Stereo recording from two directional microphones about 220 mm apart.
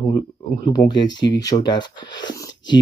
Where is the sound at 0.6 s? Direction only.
20° left (ahead or behind).